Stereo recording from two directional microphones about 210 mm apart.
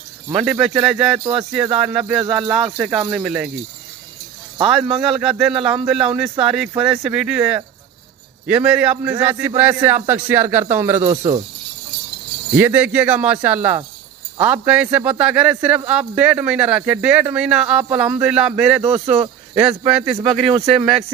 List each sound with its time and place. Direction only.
0.3 s a man's voice: 5° right (ahead or behind)
4.6 s a man's voice: centre (ahead or behind)
11.0 s speech: 25° right (ahead or behind)
12.5 s a man's voice: 10° right (ahead or behind)
18.9 s speech: 30° right (ahead or behind)
19.9 s a man's voice: 5° right (ahead or behind)
20.4 s speech: 25° right (ahead or behind)